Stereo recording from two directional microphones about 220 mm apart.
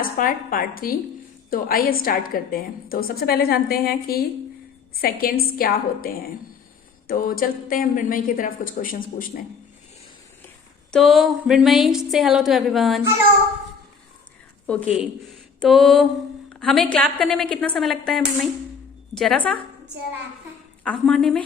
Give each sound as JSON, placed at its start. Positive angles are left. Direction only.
{"t": 0.0, "sound": "a woman's voice", "side_deg": 40}
{"t": 7.1, "sound": "speech", "side_deg": 40}
{"t": 10.9, "sound": "a woman's voice", "side_deg": 0}
{"t": 14.9, "sound": "a woman's voice", "side_deg": 0}
{"t": 20.8, "sound": "a woman's voice", "side_deg": 5}